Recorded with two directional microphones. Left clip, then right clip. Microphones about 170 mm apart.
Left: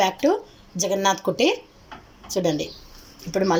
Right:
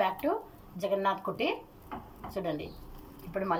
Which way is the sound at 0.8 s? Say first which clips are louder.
Left 8 dB; 55° left (ahead or behind).